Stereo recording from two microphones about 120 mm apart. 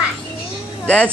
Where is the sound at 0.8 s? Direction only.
10° left (ahead or behind).